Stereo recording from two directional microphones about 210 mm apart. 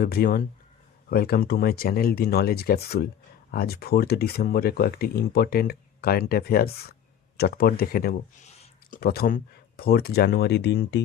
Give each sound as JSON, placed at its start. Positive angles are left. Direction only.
{"t": 0.0, "sound": "speech", "side_deg": 45}